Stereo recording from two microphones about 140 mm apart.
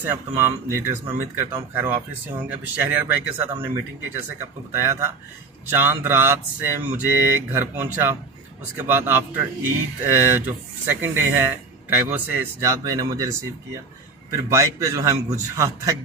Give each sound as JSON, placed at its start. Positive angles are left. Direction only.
{"t": 0.0, "sound": "speech", "side_deg": -20}
{"t": 12.8, "sound": "a man's voice", "side_deg": -25}